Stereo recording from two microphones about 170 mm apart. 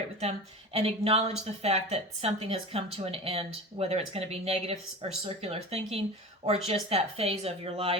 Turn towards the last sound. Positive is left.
turn(degrees=-35)  # may be behind; listen again after turning